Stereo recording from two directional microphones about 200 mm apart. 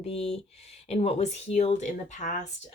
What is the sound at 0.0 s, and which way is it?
Speech, 30° left (ahead or behind).